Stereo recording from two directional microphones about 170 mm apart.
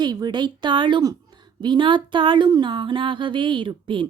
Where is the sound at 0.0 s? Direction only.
25° right (ahead or behind).